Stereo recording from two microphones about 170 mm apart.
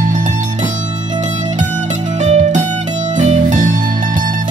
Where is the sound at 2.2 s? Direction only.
40° right (ahead or behind).